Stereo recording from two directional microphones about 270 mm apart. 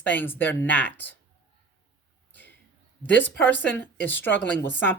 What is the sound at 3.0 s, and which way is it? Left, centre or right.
Speech, centre.